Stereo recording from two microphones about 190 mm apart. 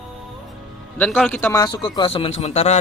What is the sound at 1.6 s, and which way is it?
Speech, 25° left (ahead or behind).